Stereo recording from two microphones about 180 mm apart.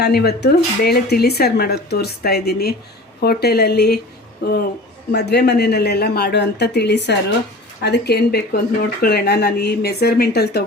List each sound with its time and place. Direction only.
0.0 s speech: 60° left (ahead or behind)